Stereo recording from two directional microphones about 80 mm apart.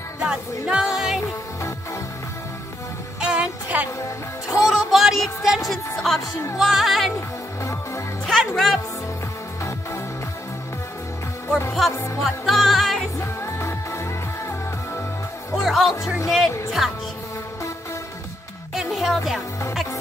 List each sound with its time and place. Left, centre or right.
0.7 s music: centre
3.2 s music: centre
4.0 s speech: left
4.6 s music: centre
7.2 s music: left
8.3 s music: centre
11.8 s music: centre
13.2 s music: left
15.5 s music: centre
18.8 s music: centre